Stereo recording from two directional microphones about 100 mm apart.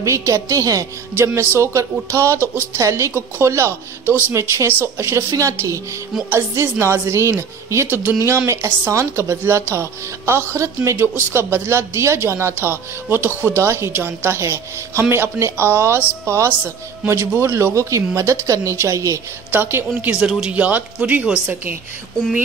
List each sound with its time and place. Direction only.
0.0 s a woman's voice: 30° right (ahead or behind)
19.5 s a woman's voice: 20° right (ahead or behind)